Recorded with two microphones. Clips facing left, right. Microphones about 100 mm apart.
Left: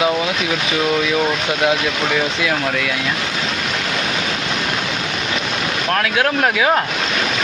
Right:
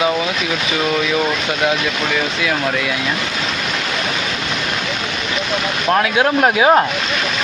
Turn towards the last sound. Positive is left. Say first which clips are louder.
# right 4 dB
turn(degrees=-25)  # may be behind; listen again after turning